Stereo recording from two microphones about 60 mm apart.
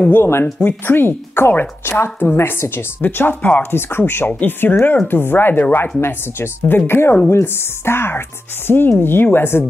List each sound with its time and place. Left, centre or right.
0.1 s a woman's voice: left
3.7 s a woman's voice: left